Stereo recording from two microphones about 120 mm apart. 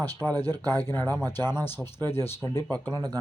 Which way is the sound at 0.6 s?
30° right (ahead or behind).